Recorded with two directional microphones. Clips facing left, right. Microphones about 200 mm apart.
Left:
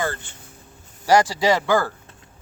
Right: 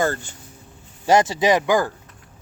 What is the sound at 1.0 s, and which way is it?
Speech, 20° right (ahead or behind).